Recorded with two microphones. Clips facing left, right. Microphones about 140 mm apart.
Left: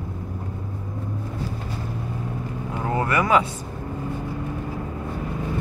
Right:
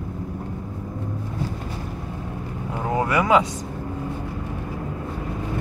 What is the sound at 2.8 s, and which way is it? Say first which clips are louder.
Vehicle: right 1 dB; 15° right (ahead or behind).